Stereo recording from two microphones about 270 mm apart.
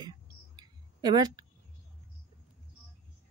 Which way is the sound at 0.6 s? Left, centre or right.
Centre.